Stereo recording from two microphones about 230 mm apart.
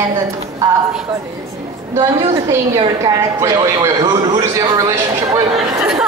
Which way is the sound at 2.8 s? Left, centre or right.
Centre.